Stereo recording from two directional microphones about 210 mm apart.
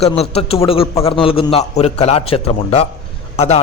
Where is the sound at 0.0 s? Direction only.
30° left (ahead or behind).